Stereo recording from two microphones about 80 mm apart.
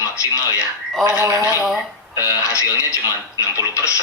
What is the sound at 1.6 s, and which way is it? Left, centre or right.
Speech, centre.